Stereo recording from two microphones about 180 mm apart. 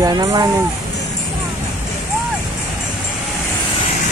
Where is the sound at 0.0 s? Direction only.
20° right (ahead or behind).